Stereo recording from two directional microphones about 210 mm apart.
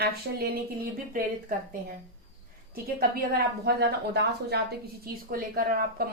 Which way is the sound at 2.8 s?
45° right (ahead or behind).